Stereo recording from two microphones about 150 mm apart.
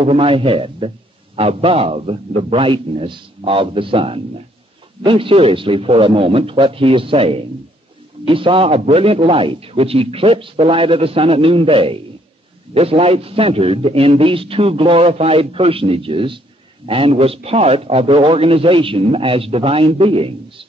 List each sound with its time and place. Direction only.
0.0 s a man's voice: 40° right (ahead or behind)